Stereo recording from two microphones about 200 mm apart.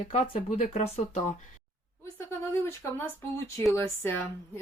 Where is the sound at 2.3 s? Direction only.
10° left (ahead or behind).